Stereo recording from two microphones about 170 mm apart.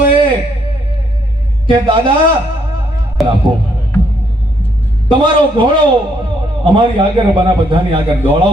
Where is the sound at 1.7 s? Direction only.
30° right (ahead or behind).